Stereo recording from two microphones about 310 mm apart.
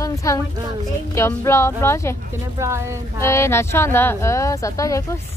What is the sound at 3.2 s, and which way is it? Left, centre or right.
A woman's voice, centre.